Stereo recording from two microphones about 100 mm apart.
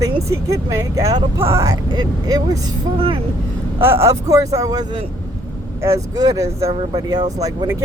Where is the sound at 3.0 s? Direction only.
65° right (ahead or behind).